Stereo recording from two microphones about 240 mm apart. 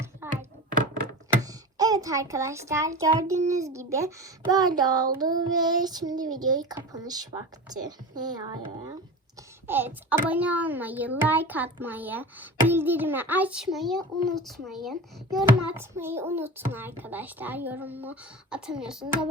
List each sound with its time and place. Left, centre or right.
0.2 s thunk: centre
1.5 s a child's voice: centre
9.6 s a child's voice: centre